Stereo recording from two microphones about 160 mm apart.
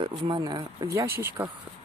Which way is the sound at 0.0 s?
30° right (ahead or behind).